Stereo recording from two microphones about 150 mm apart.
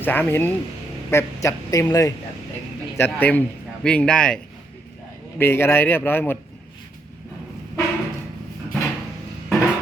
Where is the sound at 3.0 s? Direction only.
10° left (ahead or behind).